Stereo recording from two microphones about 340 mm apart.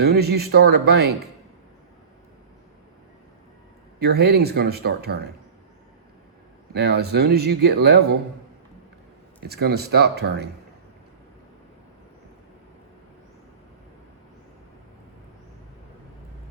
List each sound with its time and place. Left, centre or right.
0.0 s speech: right
4.0 s speech: right
6.7 s speech: right
9.4 s speech: right